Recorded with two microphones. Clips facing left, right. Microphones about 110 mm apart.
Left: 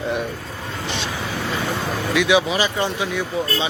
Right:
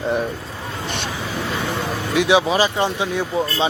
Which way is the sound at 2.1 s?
30° right (ahead or behind).